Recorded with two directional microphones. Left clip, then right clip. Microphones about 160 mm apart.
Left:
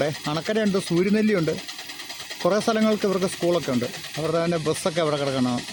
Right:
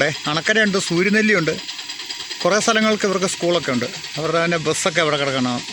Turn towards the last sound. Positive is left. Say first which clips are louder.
# right 4 dB
turn(degrees=0)  # may be behind; listen again after turning